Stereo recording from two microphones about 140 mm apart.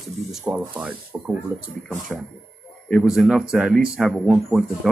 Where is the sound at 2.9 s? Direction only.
Centre (ahead or behind).